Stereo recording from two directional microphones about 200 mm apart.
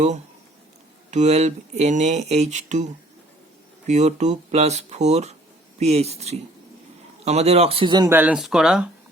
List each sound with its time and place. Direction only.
1.1 s speech: 35° right (ahead or behind)
3.8 s speech: 35° right (ahead or behind); by 8.9 s 5° right (ahead or behind)